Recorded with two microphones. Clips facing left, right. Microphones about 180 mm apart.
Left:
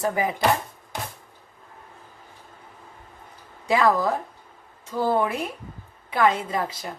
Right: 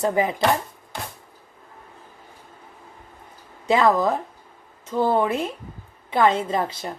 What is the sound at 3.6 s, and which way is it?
A woman's voice, 20° right (ahead or behind).